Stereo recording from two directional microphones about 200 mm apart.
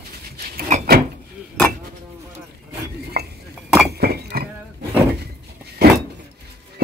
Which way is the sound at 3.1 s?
55° right (ahead or behind).